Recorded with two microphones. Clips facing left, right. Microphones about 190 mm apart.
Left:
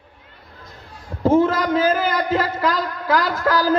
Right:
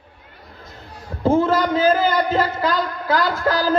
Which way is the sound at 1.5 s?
30° right (ahead or behind).